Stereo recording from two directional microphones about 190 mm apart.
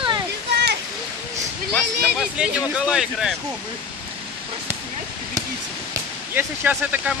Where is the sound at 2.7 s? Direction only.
Centre (ahead or behind).